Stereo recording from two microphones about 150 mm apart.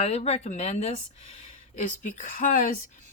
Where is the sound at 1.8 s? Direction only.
60° left (ahead or behind).